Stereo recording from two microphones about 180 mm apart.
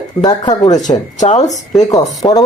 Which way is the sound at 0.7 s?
40° left (ahead or behind).